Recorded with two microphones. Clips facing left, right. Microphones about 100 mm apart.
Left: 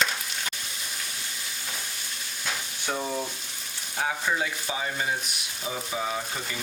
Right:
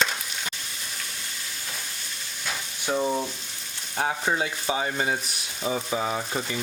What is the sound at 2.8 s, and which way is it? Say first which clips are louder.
Frying: right 5 dB; 10° right (ahead or behind).